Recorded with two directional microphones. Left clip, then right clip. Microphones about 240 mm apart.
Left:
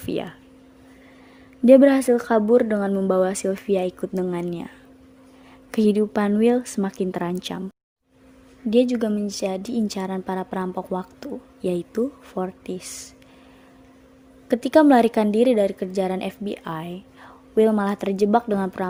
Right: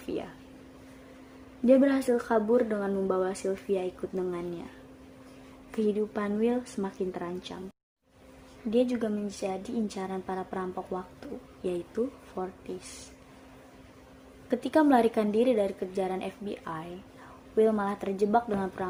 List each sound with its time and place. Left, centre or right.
0.0 s speech: left
1.6 s a woman's voice: left
5.7 s a woman's voice: left
8.7 s a woman's voice: left
14.4 s a woman's voice: left